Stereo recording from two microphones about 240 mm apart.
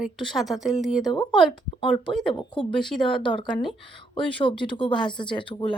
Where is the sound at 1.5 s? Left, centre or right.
Centre.